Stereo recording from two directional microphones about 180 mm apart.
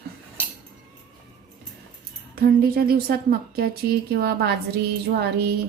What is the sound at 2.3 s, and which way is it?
A woman's voice, 60° right (ahead or behind).